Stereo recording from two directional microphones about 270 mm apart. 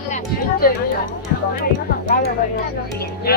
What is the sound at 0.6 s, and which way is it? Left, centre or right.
Speech, left.